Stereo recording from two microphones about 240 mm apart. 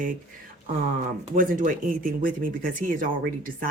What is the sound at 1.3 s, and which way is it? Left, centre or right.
Speech, right.